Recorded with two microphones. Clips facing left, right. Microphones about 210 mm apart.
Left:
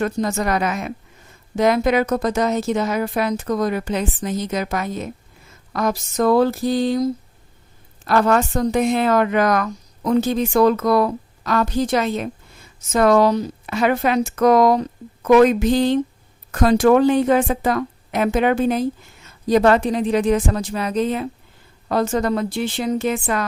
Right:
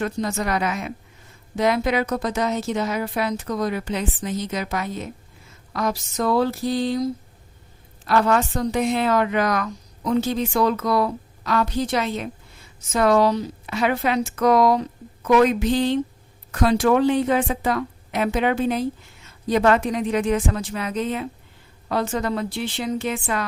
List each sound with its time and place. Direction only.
0.0 s a woman's voice: 45° left (ahead or behind)
8.0 s a woman's voice: 45° left (ahead or behind)